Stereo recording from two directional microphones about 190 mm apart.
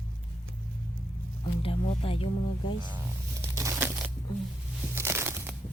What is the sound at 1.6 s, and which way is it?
Speech, 30° left (ahead or behind).